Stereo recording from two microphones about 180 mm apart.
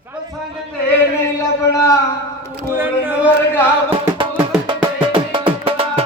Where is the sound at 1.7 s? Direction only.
20° left (ahead or behind).